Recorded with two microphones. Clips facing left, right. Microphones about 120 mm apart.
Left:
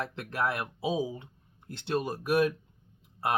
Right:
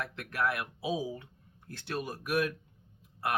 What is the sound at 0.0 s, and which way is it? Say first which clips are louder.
Speech: left 2 dB; 30° left (ahead or behind).